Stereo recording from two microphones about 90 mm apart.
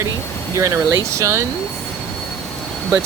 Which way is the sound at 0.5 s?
35° right (ahead or behind).